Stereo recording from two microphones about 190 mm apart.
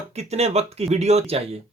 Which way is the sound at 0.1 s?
35° right (ahead or behind).